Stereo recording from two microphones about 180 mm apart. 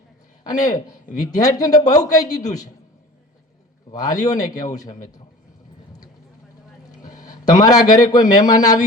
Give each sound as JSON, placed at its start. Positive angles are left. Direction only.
{"t": 0.4, "sound": "a man's voice", "side_deg": 20}
{"t": 3.9, "sound": "a man's voice", "side_deg": 20}
{"t": 7.0, "sound": "a sound", "side_deg": 20}
{"t": 8.3, "sound": "a man's voice", "side_deg": 20}